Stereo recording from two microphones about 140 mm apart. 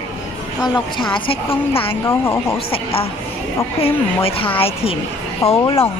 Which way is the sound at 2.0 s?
20° left (ahead or behind).